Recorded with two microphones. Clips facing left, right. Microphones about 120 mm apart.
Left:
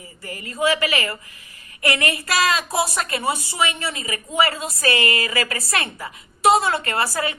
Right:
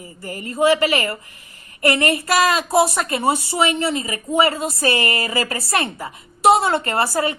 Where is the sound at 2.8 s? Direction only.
25° right (ahead or behind).